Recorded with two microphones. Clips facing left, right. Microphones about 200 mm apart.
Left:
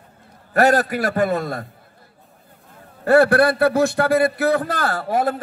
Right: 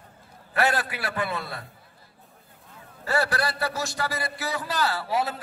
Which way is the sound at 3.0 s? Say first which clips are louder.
Left 13 dB; 55° left (ahead or behind).